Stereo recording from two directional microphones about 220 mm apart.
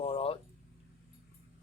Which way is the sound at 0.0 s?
25° left (ahead or behind).